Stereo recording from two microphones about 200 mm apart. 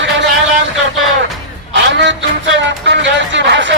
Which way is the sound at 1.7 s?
65° right (ahead or behind).